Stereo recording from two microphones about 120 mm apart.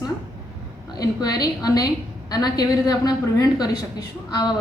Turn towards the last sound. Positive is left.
turn(degrees=35)  # may be behind; listen again after turning